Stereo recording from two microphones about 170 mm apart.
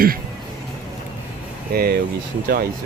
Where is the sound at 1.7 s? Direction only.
65° right (ahead or behind).